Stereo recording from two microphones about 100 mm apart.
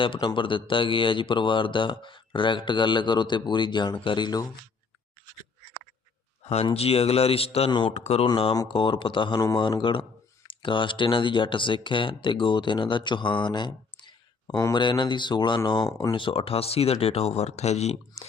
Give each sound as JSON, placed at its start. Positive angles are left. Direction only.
{"t": 0.0, "sound": "speech", "side_deg": 60}
{"t": 6.4, "sound": "a sound", "side_deg": 90}
{"t": 6.7, "sound": "speech", "side_deg": 85}
{"t": 7.7, "sound": "speech", "side_deg": 50}
{"t": 8.0, "sound": "speech", "side_deg": 90}
{"t": 8.7, "sound": "speech", "side_deg": 55}
{"t": 16.1, "sound": "speech", "side_deg": 65}